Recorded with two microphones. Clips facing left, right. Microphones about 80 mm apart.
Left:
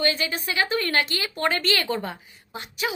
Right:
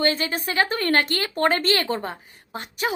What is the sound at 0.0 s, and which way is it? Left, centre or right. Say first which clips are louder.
A woman's voice: right 2 dB; right.